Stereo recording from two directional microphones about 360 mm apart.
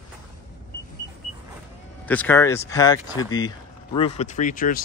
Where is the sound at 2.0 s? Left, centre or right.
Centre.